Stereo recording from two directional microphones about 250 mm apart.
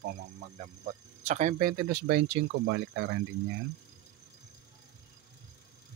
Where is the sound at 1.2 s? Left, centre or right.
Right.